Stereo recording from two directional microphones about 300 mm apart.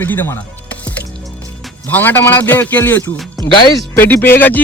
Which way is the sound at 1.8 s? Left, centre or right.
Centre.